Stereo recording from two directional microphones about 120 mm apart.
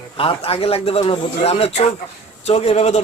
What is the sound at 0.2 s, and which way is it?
A man's voice, 50° left (ahead or behind).